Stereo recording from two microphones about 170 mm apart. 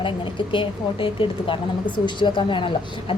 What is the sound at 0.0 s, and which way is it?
A woman's voice, 30° left (ahead or behind).